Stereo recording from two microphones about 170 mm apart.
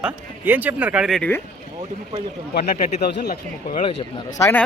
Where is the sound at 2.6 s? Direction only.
45° left (ahead or behind).